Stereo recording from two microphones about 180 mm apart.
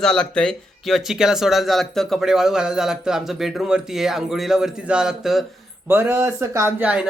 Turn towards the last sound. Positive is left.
turn(degrees=-10)  # may be behind; listen again after turning